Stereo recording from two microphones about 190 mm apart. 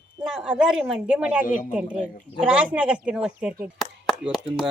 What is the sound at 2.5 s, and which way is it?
A woman's voice, 5° right (ahead or behind).